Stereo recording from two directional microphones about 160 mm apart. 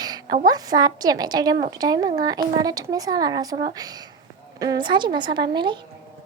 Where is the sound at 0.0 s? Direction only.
25° right (ahead or behind).